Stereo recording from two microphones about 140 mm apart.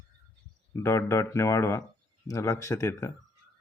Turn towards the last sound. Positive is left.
turn(degrees=20)  # may be behind; listen again after turning